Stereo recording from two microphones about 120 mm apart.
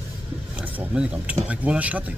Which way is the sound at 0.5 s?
10° right (ahead or behind).